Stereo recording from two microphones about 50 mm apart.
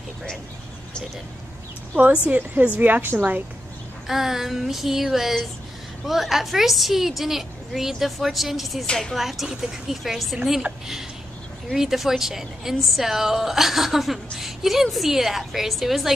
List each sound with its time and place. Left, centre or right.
2.3 s speech: right
4.1 s female singing: centre
6.0 s a woman's voice: centre
8.8 s speech: centre
9.1 s a woman's voice: centre
11.7 s a woman's voice: centre